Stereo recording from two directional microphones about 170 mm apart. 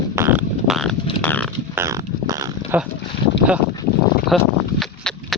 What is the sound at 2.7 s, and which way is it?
Speech, 10° right (ahead or behind).